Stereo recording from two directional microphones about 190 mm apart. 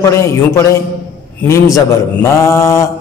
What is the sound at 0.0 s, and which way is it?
A man's voice, 15° left (ahead or behind).